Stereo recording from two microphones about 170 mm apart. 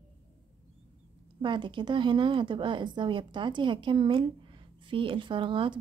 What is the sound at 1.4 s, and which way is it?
A woman's voice, 30° right (ahead or behind).